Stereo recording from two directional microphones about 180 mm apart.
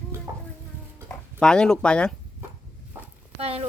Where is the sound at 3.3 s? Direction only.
35° right (ahead or behind).